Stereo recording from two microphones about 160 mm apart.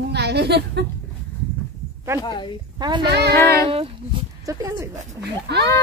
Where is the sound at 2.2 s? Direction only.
30° left (ahead or behind).